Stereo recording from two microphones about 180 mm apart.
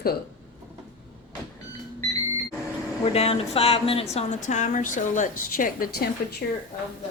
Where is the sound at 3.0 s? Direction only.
35° left (ahead or behind); by 5.9 s 50° left (ahead or behind).